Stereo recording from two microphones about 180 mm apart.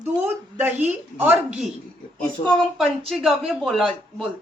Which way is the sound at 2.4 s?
35° left (ahead or behind).